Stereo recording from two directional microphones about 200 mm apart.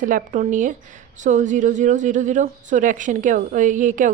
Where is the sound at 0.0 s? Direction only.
40° right (ahead or behind).